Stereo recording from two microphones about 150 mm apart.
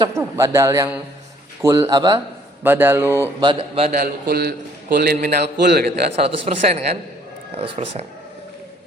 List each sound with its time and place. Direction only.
0.0 s a man's voice: 20° right (ahead or behind)
2.6 s speech: 15° right (ahead or behind)
3.4 s speech: 35° right (ahead or behind)
3.9 s a man's voice: 80° right
6.1 s a man's voice: 40° right (ahead or behind)